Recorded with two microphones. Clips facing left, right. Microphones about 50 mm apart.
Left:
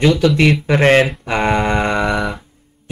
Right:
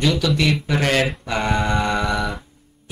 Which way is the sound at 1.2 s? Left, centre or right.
Left.